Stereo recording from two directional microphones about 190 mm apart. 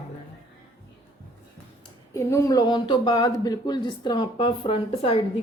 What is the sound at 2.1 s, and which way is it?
Speech, 15° left (ahead or behind).